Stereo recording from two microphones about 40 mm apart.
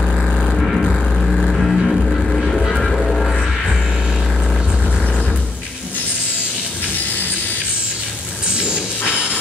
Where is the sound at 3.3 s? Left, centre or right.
Centre.